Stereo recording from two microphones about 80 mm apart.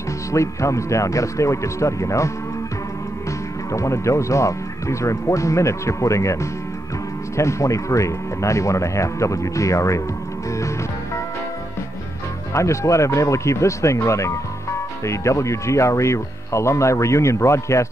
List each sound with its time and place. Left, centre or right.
0.3 s speech: left
3.7 s speech: left
7.3 s speech: left
12.5 s speech: left